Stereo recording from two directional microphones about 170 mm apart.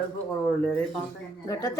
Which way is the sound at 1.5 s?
20° left (ahead or behind).